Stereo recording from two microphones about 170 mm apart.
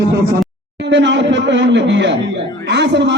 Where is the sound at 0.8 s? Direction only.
90° right.